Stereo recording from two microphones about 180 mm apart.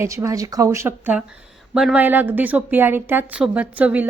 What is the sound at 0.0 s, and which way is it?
A woman's voice, 15° right (ahead or behind).